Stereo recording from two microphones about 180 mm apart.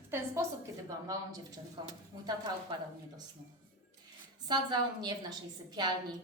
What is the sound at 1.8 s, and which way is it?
Speech, 25° right (ahead or behind).